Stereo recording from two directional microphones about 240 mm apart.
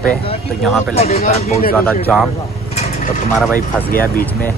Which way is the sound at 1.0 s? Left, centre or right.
Left.